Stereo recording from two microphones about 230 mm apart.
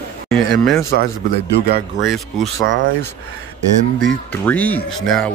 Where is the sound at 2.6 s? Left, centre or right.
Right.